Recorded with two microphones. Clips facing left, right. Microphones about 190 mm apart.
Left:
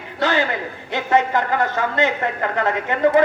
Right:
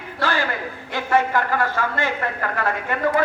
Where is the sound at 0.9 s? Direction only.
20° left (ahead or behind).